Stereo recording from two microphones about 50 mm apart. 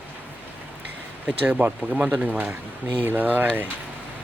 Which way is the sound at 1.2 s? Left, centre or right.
Right.